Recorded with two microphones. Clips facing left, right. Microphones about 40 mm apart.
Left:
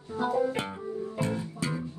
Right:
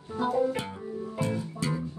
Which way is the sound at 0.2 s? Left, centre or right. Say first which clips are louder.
Right 1 dB; centre.